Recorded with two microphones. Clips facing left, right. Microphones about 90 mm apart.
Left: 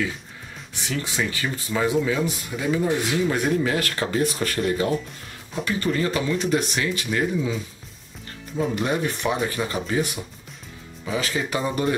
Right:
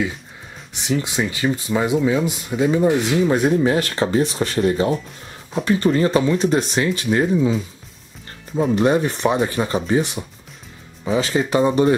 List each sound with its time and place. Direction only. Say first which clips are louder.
0.7 s speech: right 6 dB; 20° right (ahead or behind)
8.5 s speech: right 7 dB; 35° right (ahead or behind)